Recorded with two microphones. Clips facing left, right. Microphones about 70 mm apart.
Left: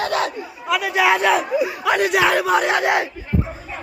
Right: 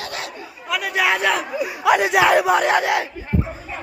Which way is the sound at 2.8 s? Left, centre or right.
Centre.